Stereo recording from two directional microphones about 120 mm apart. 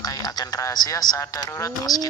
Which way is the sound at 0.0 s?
30° left (ahead or behind).